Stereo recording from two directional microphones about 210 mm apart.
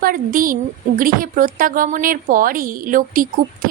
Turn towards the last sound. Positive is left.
turn(degrees=-40)  # may be behind; listen again after turning